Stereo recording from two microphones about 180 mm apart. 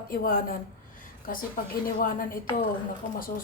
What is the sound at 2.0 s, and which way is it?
Speech, 55° left (ahead or behind).